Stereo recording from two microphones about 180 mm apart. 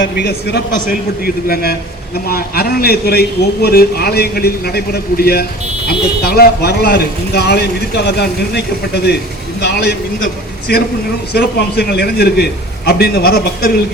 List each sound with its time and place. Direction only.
0.0 s a man's voice: 65° left (ahead or behind)
9.6 s a sound: 60° left (ahead or behind)
10.7 s a man's voice: 65° left (ahead or behind)